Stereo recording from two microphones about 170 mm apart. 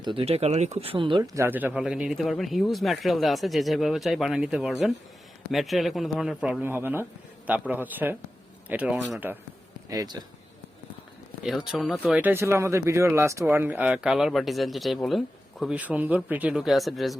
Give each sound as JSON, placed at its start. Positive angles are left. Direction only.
{"t": 0.0, "sound": "speech", "side_deg": -30}
{"t": 9.9, "sound": "a man's voice", "side_deg": -20}
{"t": 11.4, "sound": "speech", "side_deg": -5}